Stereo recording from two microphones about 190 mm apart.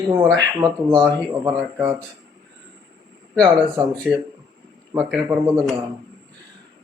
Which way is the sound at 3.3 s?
5° right (ahead or behind).